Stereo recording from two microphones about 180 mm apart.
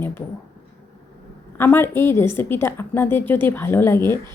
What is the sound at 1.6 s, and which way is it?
Speech, 15° left (ahead or behind).